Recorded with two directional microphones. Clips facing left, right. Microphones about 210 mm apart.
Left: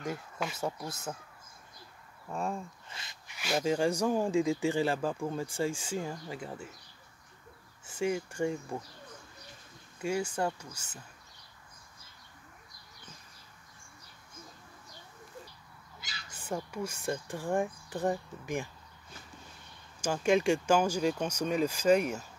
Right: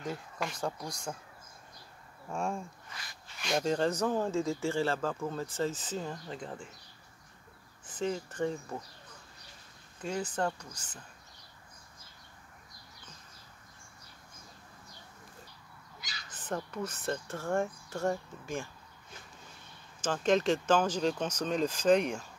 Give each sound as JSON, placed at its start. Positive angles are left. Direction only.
{"t": 0.0, "sound": "speech", "side_deg": 5}
{"t": 2.3, "sound": "speech", "side_deg": 0}
{"t": 2.9, "sound": "rub", "side_deg": 25}
{"t": 3.3, "sound": "speech", "side_deg": 5}
{"t": 7.8, "sound": "speech", "side_deg": 10}
{"t": 10.0, "sound": "speech", "side_deg": 10}
{"t": 16.3, "sound": "speech", "side_deg": 10}
{"t": 20.0, "sound": "speech", "side_deg": 10}